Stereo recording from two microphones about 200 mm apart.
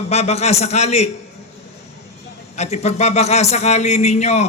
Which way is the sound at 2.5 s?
35° left (ahead or behind).